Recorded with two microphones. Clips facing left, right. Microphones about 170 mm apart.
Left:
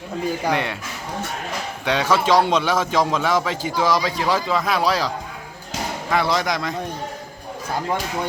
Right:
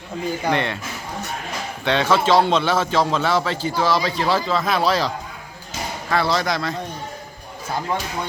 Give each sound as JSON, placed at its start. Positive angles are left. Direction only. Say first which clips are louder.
{"t": 0.4, "sound": "a man's voice", "louder": "right 3 dB", "side_deg": 10}
{"t": 1.8, "sound": "a man's voice", "louder": "right 1 dB", "side_deg": 10}